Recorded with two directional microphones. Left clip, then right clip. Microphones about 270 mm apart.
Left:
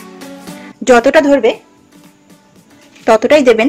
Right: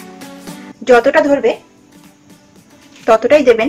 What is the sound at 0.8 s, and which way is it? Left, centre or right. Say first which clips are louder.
Speech: left 2 dB; left.